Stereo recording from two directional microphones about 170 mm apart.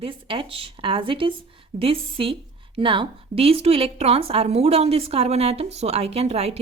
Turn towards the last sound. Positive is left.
turn(degrees=-40)  # may be behind; listen again after turning